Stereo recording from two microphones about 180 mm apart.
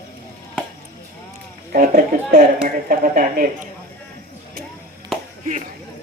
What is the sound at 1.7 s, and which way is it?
Speech, 45° right (ahead or behind).